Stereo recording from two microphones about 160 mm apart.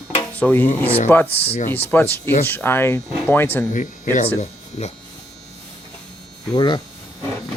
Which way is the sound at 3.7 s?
55° left (ahead or behind).